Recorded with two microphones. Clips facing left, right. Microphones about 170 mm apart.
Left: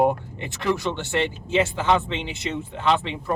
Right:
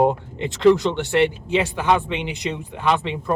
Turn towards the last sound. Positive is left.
turn(degrees=-15)  # may be behind; listen again after turning